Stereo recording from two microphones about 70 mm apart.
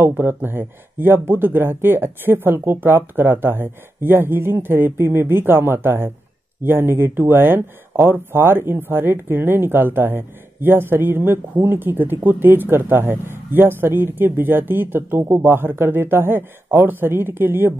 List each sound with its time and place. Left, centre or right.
0.0 s speech: right